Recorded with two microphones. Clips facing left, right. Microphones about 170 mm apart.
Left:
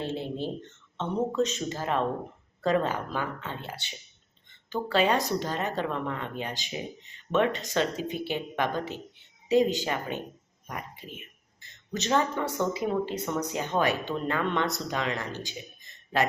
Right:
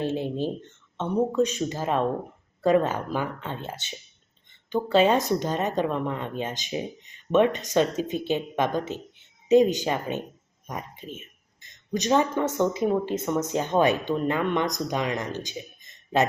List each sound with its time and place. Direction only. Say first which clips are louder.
0.0 s speech: right 5 dB; 15° right (ahead or behind)
11.6 s speech: right 5 dB; 15° right (ahead or behind)